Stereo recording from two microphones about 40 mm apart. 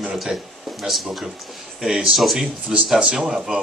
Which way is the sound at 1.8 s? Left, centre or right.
Centre.